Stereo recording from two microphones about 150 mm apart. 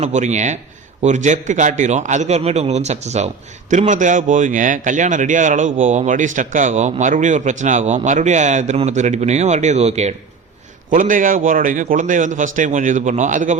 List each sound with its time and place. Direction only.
0.0 s speech: 50° right (ahead or behind)
10.9 s a man's voice: 60° right (ahead or behind)